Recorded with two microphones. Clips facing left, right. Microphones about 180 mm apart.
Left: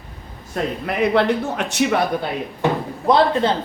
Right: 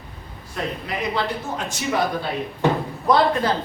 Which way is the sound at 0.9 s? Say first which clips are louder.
Left 10 dB; 60° left (ahead or behind).